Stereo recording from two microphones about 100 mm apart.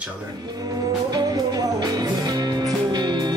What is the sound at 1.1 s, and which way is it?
Music, 40° right (ahead or behind).